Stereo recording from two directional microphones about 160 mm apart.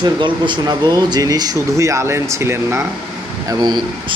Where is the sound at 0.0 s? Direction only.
30° right (ahead or behind).